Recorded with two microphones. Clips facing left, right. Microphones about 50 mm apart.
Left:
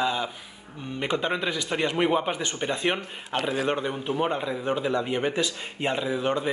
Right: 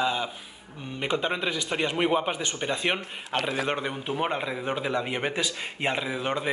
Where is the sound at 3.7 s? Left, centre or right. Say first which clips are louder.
Left 2 dB; right.